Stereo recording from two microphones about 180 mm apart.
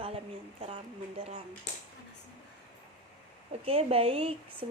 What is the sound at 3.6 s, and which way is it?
A woman's voice, 35° right (ahead or behind).